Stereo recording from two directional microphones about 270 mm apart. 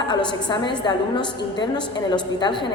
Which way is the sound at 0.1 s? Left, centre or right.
Centre.